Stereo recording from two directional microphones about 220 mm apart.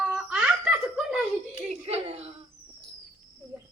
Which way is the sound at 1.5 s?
25° right (ahead or behind).